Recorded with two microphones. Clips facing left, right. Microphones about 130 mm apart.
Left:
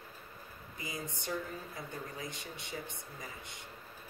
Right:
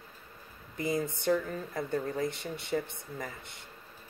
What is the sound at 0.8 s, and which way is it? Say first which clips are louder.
Speech: right 11 dB; 55° right (ahead or behind).